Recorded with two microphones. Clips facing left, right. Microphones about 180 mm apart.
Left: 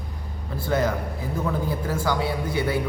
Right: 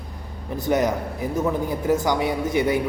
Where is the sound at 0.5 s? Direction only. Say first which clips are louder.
Right 3 dB; 20° right (ahead or behind).